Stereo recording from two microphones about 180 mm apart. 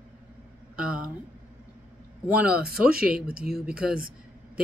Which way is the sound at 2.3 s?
5° right (ahead or behind).